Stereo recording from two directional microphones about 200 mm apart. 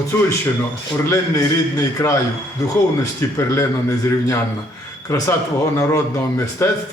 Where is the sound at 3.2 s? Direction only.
15° left (ahead or behind).